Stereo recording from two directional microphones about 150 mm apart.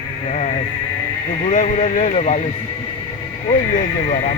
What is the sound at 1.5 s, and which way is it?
Speech, 50° left (ahead or behind).